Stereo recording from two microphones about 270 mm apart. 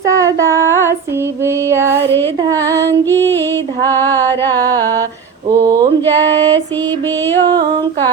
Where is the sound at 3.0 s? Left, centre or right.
Centre.